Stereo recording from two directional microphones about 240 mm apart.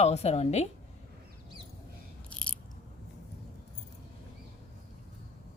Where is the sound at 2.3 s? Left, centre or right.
Centre.